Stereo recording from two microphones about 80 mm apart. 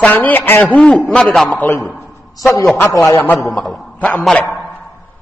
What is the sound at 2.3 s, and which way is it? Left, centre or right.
Speech, left.